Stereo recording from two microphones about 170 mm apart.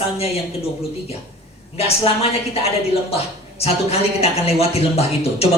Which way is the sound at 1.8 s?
35° left (ahead or behind).